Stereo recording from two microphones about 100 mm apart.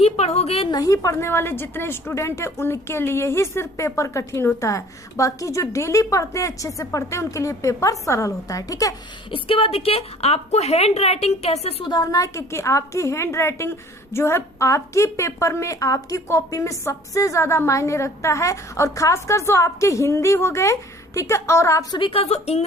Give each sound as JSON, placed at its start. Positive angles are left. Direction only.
{"t": 0.0, "sound": "a sound", "side_deg": 90}
{"t": 0.7, "sound": "a woman's voice", "side_deg": 35}
{"t": 9.3, "sound": "a woman's voice", "side_deg": 70}
{"t": 11.9, "sound": "a woman's voice", "side_deg": 40}
{"t": 21.9, "sound": "a woman's voice", "side_deg": 55}
{"t": 22.2, "sound": "a woman's voice", "side_deg": 90}